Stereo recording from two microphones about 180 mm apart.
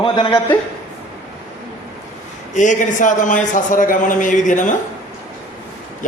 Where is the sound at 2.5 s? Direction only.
45° left (ahead or behind).